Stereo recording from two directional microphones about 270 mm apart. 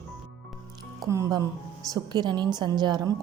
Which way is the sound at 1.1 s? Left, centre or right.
Centre.